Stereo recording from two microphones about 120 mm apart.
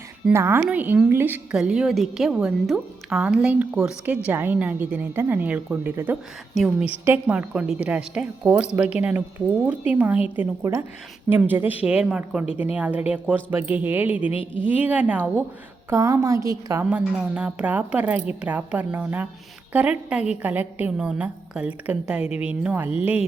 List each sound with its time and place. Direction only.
0.3 s a woman's voice: 20° right (ahead or behind)
6.5 s a woman's voice: centre (ahead or behind)
7.0 s a woman's voice: 20° right (ahead or behind)
7.3 s a woman's voice: 10° right (ahead or behind)
15.9 s a woman's voice: 25° right (ahead or behind)
16.9 s a woman's voice: 10° right (ahead or behind)